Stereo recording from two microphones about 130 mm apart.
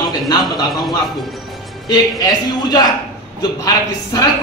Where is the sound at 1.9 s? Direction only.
30° left (ahead or behind).